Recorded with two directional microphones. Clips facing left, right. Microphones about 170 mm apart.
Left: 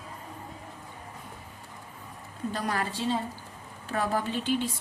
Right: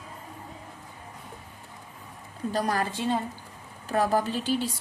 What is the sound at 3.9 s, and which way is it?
Speech, 40° right (ahead or behind).